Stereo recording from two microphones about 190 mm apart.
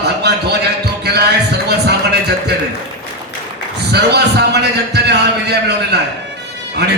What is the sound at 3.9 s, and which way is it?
A man's voice, 60° right (ahead or behind).